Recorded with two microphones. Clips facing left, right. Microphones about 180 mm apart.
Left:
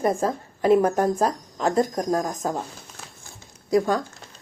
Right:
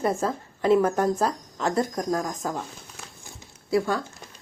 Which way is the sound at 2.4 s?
20° left (ahead or behind).